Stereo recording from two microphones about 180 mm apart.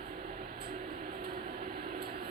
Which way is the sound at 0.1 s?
50° right (ahead or behind).